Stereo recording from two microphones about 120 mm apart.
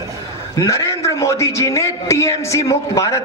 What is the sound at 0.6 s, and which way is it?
A man's voice, 25° left (ahead or behind).